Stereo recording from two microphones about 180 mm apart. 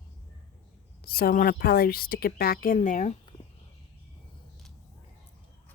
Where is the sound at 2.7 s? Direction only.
40° left (ahead or behind).